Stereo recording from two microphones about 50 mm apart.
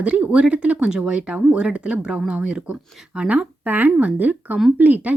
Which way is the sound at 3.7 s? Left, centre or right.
Right.